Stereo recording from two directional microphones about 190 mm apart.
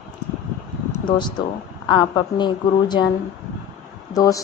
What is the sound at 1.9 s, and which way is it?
A woman's voice, 25° left (ahead or behind).